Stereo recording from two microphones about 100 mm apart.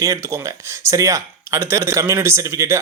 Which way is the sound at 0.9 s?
35° right (ahead or behind).